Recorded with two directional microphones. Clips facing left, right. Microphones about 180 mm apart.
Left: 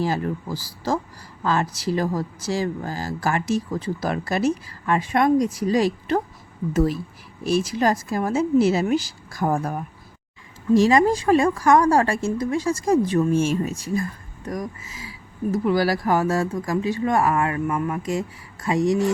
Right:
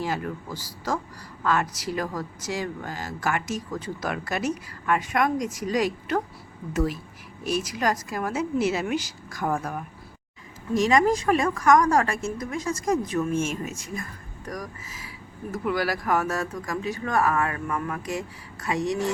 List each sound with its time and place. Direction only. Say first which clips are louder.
0.0 s speech: left 5 dB; 30° left (ahead or behind)
7.4 s speech: left 5 dB; 30° left (ahead or behind)